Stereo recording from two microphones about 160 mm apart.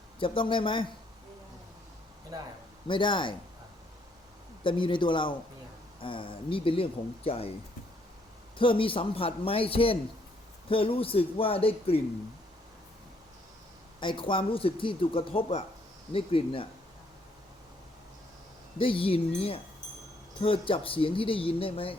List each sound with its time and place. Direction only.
0.2 s speech: 30° left (ahead or behind)
2.8 s speech: 30° left (ahead or behind)
4.6 s speech: 30° left (ahead or behind)
8.5 s speech: 35° left (ahead or behind)
14.0 s speech: 30° left (ahead or behind)
18.8 s speech: 35° left (ahead or behind)